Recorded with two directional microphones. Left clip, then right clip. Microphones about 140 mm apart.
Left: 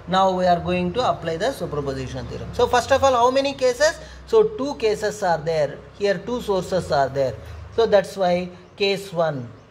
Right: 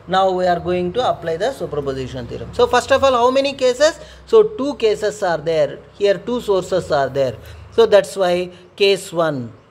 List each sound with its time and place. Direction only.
0.1 s a man's voice: 35° right (ahead or behind); by 9.4 s 50° right (ahead or behind)